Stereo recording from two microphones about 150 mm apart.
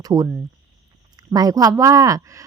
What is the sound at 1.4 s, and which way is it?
Speech, 25° right (ahead or behind).